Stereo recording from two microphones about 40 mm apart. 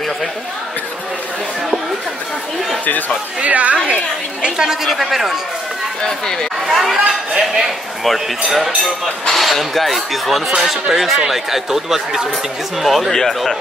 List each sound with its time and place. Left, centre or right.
3.3 s a woman's voice: right
3.7 s a woman's voice: right
4.8 s speech: centre
6.0 s speech: centre
6.7 s speech: centre
12.8 s speech: centre